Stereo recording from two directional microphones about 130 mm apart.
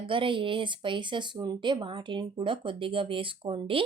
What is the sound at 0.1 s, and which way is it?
Speech, 40° right (ahead or behind).